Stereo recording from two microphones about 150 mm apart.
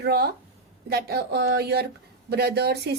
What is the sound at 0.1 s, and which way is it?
Speech, 90° right.